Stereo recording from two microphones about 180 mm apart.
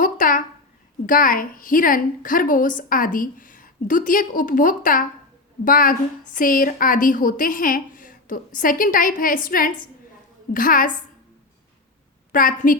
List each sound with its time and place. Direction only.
0.0 s a sound: 50° left (ahead or behind)
1.0 s a woman's voice: 50° left (ahead or behind)
12.3 s a woman's voice: 50° left (ahead or behind)